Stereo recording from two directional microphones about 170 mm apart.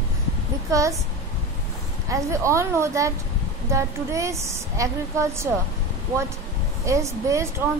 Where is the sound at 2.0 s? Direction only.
15° right (ahead or behind).